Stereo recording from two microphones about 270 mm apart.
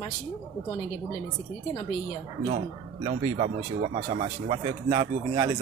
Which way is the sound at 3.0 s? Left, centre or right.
Right.